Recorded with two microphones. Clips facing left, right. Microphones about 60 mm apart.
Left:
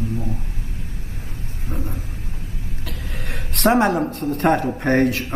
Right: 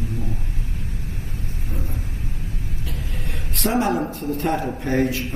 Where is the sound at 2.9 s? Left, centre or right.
Left.